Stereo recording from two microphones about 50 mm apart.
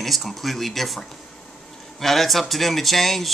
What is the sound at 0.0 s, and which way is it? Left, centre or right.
Speech, centre.